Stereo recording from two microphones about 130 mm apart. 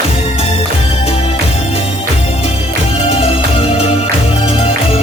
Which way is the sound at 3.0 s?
50° left (ahead or behind).